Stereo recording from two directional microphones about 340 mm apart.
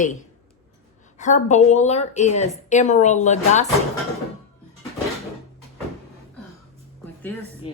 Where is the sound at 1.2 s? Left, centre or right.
Left.